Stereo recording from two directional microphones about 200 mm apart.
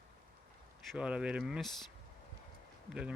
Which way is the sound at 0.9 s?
5° right (ahead or behind).